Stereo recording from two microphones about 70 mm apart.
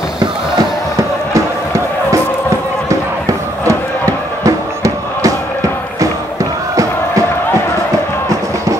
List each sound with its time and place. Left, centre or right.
4.5 s music: right
6.7 s music: right